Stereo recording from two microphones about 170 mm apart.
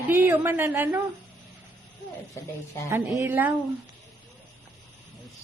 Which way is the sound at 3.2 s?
10° right (ahead or behind).